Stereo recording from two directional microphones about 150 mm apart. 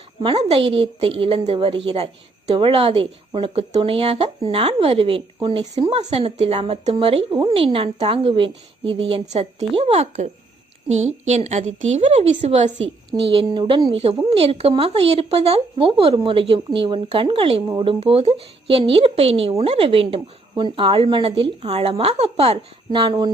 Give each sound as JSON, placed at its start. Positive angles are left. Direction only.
{"t": 0.2, "sound": "a woman's voice", "side_deg": -35}